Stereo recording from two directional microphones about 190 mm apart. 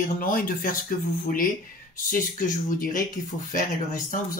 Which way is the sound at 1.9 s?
45° left (ahead or behind).